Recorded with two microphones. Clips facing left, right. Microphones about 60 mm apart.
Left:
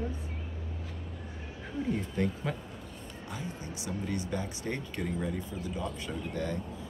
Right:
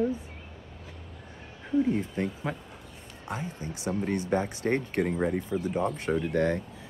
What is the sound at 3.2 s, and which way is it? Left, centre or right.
Speech, right.